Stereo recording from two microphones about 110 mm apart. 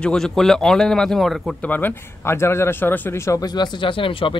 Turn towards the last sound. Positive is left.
turn(degrees=50)  # may be behind; listen again after turning